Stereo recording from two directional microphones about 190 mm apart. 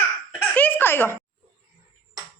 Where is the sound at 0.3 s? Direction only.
10° left (ahead or behind).